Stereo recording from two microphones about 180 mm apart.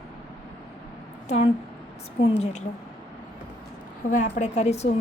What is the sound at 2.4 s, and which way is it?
Speech, 40° left (ahead or behind).